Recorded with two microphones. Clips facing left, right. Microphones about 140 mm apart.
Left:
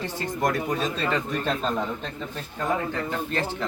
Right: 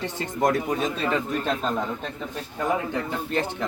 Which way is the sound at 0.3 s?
20° right (ahead or behind).